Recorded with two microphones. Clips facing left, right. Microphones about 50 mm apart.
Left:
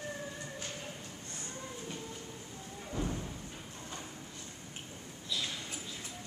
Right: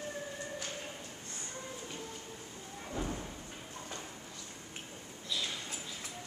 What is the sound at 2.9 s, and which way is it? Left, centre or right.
Thump, centre.